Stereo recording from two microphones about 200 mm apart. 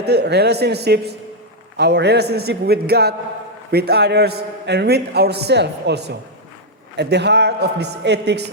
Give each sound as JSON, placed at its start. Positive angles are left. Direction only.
{"t": 0.0, "sound": "a man's voice", "side_deg": -55}